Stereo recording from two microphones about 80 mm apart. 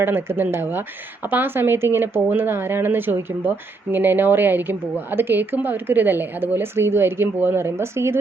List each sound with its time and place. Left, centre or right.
0.0 s a woman's voice: right